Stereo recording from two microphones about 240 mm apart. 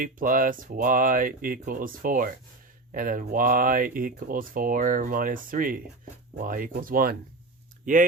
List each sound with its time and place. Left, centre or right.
0.0 s speech: right